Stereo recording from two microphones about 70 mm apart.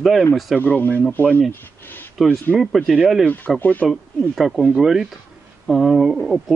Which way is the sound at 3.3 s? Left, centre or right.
Left.